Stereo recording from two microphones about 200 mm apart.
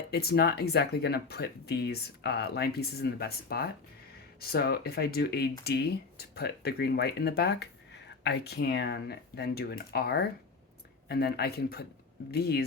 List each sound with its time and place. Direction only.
0.1 s speech: 55° left (ahead or behind)